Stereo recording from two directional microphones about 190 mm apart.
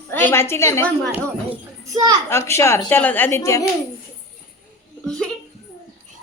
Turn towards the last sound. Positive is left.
turn(degrees=5)  # may be behind; listen again after turning